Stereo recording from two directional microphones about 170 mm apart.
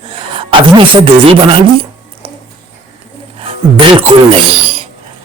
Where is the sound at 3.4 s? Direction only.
30° right (ahead or behind).